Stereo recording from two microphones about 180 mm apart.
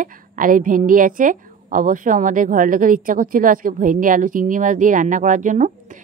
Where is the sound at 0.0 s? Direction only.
50° right (ahead or behind).